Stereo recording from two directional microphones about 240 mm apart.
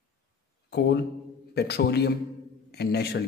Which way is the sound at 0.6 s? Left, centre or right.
Left.